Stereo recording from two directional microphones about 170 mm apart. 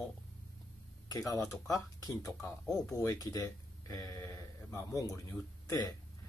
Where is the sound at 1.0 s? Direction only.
20° left (ahead or behind).